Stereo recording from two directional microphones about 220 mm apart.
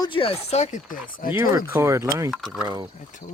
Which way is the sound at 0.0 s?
25° left (ahead or behind).